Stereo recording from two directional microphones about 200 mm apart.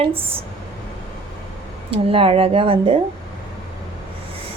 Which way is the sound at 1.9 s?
30° right (ahead or behind).